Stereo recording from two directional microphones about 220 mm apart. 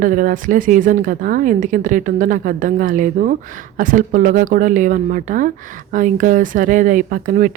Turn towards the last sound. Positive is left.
turn(degrees=-35)  # may be behind; listen again after turning